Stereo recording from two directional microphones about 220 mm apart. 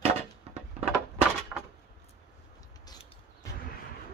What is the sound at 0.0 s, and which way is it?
Wood, 30° right (ahead or behind).